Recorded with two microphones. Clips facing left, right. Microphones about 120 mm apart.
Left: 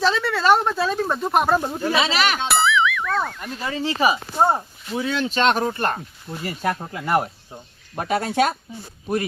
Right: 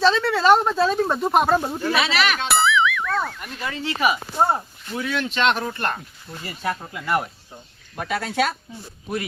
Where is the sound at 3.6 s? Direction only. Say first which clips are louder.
Left 2 dB; 35° left (ahead or behind).